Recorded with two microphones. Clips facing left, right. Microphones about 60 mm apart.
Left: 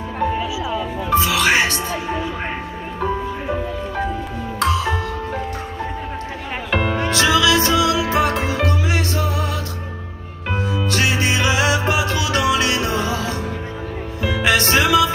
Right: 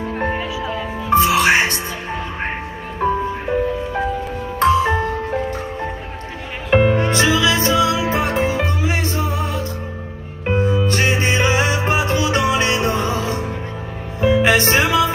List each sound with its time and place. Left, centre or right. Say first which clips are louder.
0.2 s music: left 3 dB; right
4.6 s music: right 5 dB; right
6.7 s music: right 7 dB; centre
7.1 s music: even; right
14.2 s music: right 4 dB; right